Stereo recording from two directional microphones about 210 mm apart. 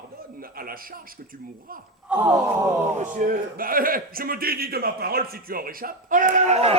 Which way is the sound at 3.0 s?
40° right (ahead or behind).